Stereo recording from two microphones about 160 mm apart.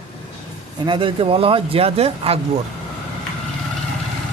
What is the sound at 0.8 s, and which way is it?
Speech, 30° right (ahead or behind).